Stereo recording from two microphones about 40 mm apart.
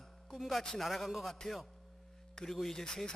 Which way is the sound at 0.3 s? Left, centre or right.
Centre.